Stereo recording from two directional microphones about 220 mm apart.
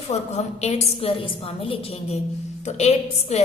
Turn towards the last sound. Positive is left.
turn(degrees=30)  # may be behind; listen again after turning